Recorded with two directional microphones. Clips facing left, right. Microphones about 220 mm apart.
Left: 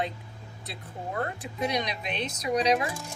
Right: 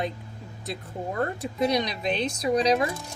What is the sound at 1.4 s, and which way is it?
Speech, 35° right (ahead or behind).